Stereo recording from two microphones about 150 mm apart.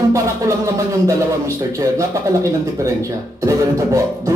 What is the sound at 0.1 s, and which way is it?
A man's voice, 20° right (ahead or behind).